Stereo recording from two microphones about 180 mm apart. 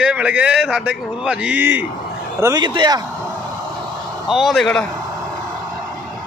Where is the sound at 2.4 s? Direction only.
25° right (ahead or behind).